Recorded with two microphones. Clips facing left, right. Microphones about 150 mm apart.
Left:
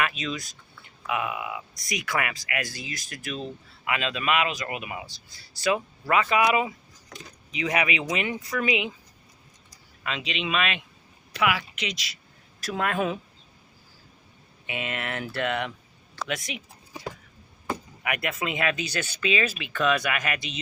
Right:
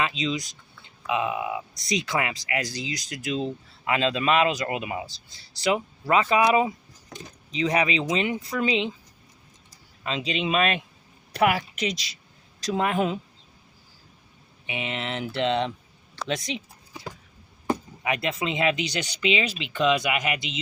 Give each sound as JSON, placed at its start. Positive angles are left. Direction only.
{"t": 0.0, "sound": "speech", "side_deg": -20}
{"t": 10.0, "sound": "speech", "side_deg": -30}
{"t": 12.5, "sound": "speech", "side_deg": -20}
{"t": 14.7, "sound": "speech", "side_deg": -20}
{"t": 17.7, "sound": "speech", "side_deg": -25}